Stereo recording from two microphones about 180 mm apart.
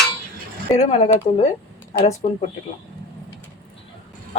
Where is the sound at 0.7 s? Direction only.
35° left (ahead or behind).